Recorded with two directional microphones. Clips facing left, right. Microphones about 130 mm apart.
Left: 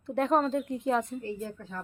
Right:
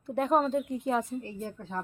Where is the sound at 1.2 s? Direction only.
35° right (ahead or behind).